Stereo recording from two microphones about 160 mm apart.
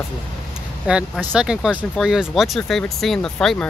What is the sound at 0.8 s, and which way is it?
Speech, 5° right (ahead or behind).